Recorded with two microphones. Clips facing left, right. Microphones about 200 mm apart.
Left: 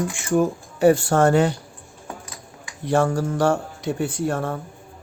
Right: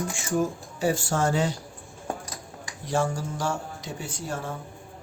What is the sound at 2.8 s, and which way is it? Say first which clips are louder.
Speech: left 7 dB; 60° left (ahead or behind).